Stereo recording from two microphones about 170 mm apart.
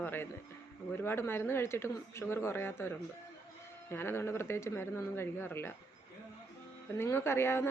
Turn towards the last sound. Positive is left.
turn(degrees=15)  # may be behind; listen again after turning